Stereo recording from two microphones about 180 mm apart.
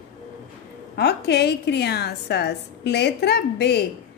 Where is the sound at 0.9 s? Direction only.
65° left (ahead or behind).